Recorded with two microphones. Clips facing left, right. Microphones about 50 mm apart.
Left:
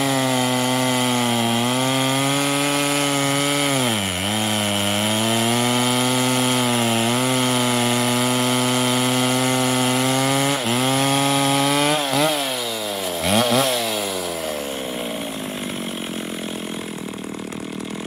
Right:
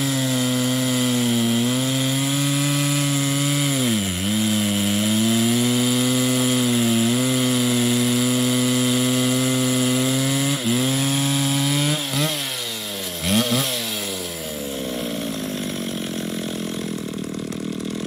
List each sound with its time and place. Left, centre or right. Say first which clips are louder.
0.0 s chainsaw: left 3 dB; left
11.0 s wood: left 4 dB; left
13.3 s chainsaw: left 3 dB; centre